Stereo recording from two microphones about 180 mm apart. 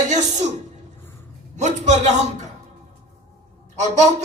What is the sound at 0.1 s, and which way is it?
Speech, 40° right (ahead or behind).